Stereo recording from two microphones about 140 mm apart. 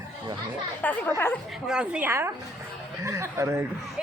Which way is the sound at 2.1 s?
20° right (ahead or behind).